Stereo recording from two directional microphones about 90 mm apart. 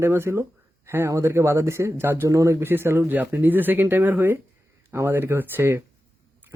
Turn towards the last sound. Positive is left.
turn(degrees=-25)  # may be behind; listen again after turning